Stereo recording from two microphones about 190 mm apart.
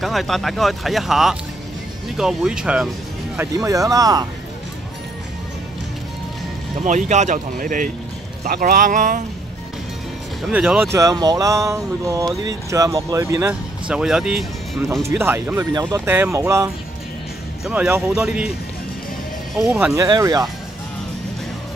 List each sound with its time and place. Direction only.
0.0 s speech: centre (ahead or behind)
3.3 s speech: 15° right (ahead or behind)
6.8 s speech: 40° right (ahead or behind)
10.4 s speech: 5° right (ahead or behind)
11.0 s speech: 20° right (ahead or behind)
13.8 s speech: 5° right (ahead or behind)
19.7 s speech: 5° right (ahead or behind)
20.0 s speech: 20° right (ahead or behind)